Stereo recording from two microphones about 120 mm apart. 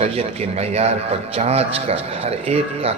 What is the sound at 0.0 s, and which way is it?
A man's voice, 60° right (ahead or behind).